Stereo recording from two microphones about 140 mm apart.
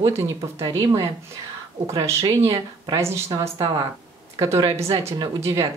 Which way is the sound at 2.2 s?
45° right (ahead or behind).